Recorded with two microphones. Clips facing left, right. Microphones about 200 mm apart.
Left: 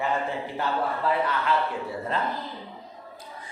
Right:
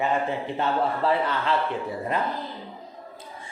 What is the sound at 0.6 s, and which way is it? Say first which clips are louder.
Speech: right 3 dB; 30° right (ahead or behind).